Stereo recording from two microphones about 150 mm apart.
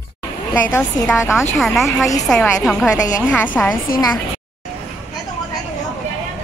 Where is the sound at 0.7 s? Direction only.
15° left (ahead or behind).